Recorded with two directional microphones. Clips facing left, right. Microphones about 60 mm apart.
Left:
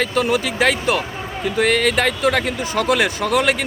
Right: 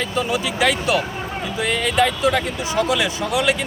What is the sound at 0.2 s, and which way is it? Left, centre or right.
Speech, left.